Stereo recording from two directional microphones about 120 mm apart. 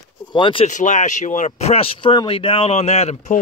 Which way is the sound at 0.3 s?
45° left (ahead or behind).